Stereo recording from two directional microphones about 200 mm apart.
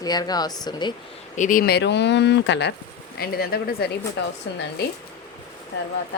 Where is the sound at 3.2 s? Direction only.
50° left (ahead or behind).